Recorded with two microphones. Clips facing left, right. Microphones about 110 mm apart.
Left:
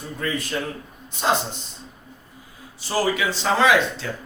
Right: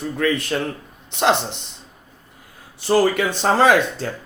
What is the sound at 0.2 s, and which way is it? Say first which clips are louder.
A man's voice: right 5 dB; 65° right (ahead or behind).